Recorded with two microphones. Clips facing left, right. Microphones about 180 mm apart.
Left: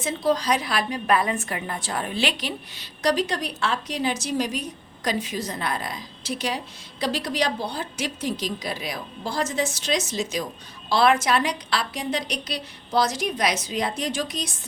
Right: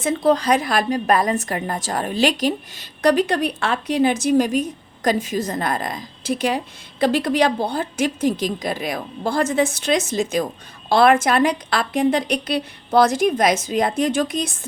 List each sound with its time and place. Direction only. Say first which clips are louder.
0.0 s a woman's voice: right 5 dB; 55° right (ahead or behind)